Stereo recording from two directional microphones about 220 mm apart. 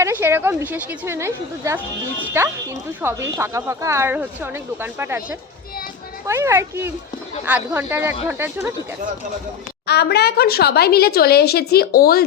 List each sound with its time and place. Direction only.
0.0 s speech: 10° right (ahead or behind)
9.8 s speech: 45° left (ahead or behind)